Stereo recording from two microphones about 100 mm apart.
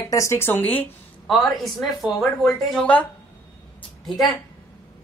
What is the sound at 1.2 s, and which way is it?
Speech, centre (ahead or behind).